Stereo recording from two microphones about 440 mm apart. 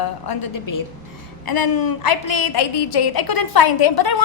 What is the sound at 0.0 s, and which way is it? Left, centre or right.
A woman's voice, left.